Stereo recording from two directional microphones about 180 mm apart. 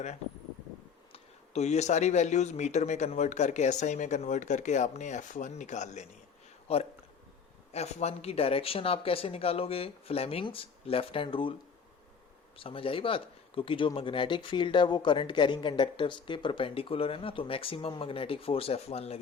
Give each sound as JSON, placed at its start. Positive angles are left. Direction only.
{"t": 1.1, "sound": "speech", "side_deg": 40}
{"t": 12.5, "sound": "speech", "side_deg": 30}